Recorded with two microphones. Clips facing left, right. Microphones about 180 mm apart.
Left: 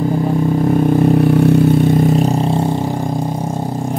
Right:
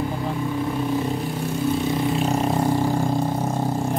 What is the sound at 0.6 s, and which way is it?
Vehicle, 50° left (ahead or behind).